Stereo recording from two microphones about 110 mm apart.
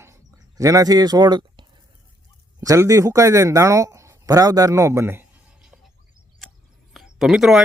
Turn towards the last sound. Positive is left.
turn(degrees=-5)  # may be behind; listen again after turning